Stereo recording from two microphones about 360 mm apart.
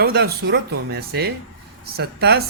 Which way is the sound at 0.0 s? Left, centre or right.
Right.